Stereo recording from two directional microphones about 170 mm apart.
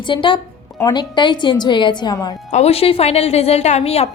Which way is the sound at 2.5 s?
40° left (ahead or behind).